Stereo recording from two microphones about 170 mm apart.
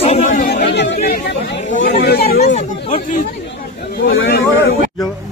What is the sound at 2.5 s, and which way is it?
Speech, 35° left (ahead or behind).